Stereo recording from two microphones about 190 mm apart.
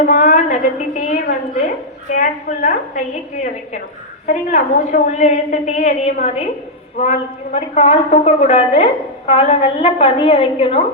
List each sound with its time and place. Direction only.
0.0 s a woman's voice: 45° left (ahead or behind)
4.3 s a woman's voice: 40° left (ahead or behind)